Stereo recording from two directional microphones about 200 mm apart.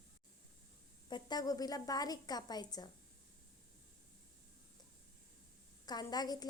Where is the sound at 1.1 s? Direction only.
20° left (ahead or behind).